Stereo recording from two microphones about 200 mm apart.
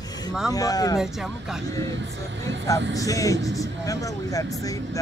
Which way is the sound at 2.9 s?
15° left (ahead or behind).